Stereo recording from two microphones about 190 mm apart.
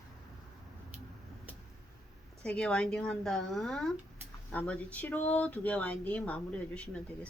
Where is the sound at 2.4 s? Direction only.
5° left (ahead or behind).